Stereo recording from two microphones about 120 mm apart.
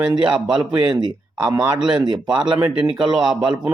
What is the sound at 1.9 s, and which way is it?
A man's voice, 40° right (ahead or behind).